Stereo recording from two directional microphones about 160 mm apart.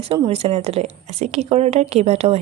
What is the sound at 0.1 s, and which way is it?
A woman's voice, 35° right (ahead or behind).